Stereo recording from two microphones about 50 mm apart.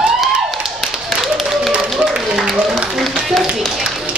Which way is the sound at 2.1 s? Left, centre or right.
Centre.